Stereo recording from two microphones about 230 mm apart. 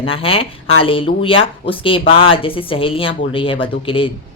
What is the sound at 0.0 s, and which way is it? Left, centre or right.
Speech, left.